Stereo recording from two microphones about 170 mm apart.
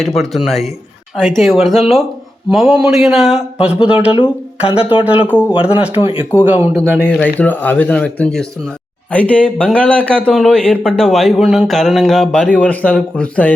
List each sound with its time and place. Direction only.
0.0 s speech: centre (ahead or behind)
4.1 s speech: 30° left (ahead or behind)
5.3 s speech: 10° right (ahead or behind)
6.9 s speech: 5° left (ahead or behind)